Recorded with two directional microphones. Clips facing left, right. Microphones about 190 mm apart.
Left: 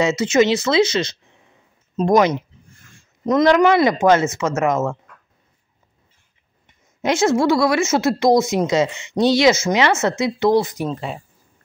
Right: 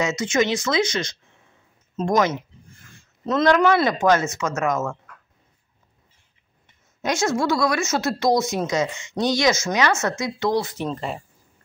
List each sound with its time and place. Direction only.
0.2 s speech: 20° left (ahead or behind)
7.0 s speech: 25° left (ahead or behind)
10.9 s speech: centre (ahead or behind)